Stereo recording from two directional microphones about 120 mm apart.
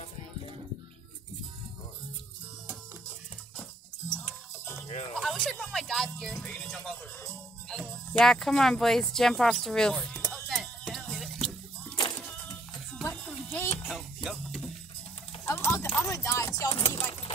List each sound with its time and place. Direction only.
5.1 s speech: 5° left (ahead or behind)
10.3 s music: 5° left (ahead or behind)
12.9 s music: 10° left (ahead or behind)
13.8 s music: 5° right (ahead or behind)
15.4 s a sound: 25° left (ahead or behind)
16.7 s keys jangling: 45° left (ahead or behind)